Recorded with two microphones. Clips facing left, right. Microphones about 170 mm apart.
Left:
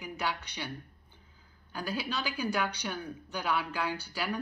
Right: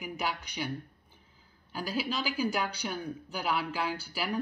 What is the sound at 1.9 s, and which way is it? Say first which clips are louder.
Speech: right 2 dB; 10° right (ahead or behind).